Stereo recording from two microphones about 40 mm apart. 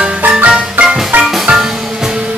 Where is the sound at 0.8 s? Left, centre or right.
Right.